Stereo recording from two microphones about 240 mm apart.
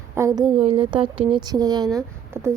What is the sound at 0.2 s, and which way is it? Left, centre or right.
A woman's voice, centre.